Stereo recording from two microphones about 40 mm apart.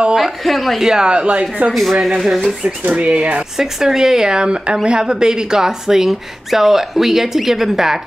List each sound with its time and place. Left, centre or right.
0.4 s speech: centre
0.7 s speech: centre
1.7 s speech: centre
2.9 s speech: right
3.5 s speech: centre